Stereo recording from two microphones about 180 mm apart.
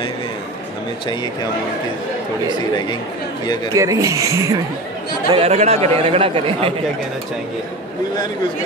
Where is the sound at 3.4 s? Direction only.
25° left (ahead or behind).